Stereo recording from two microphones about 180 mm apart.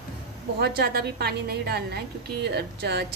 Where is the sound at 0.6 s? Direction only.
60° right (ahead or behind).